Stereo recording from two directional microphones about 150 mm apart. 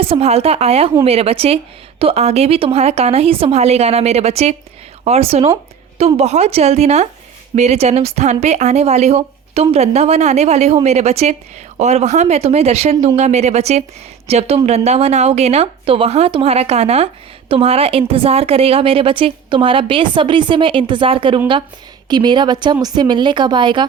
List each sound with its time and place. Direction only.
0.0 s a woman's voice: 40° right (ahead or behind)